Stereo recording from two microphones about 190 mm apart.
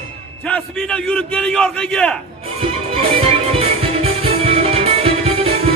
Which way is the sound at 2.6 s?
30° right (ahead or behind).